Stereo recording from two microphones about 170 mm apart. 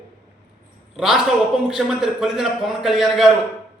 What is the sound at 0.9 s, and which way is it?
A man's voice, 5° right (ahead or behind).